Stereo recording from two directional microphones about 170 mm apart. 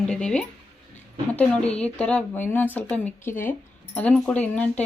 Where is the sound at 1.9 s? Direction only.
5° left (ahead or behind).